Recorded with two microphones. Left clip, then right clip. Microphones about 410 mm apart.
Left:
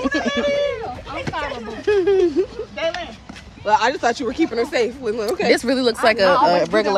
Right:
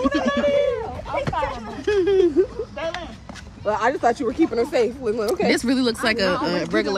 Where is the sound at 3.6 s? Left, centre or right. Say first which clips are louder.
Left 3 dB; centre.